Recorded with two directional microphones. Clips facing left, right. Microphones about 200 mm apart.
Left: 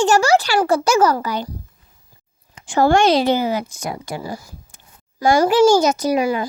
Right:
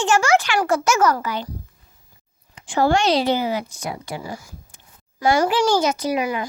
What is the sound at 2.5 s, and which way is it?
A woman's voice, 45° left (ahead or behind).